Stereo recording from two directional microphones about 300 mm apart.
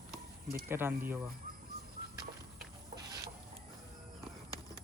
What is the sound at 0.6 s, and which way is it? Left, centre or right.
Speech, centre.